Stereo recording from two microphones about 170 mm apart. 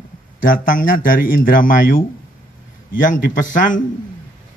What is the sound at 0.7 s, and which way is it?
A man's voice, 55° left (ahead or behind).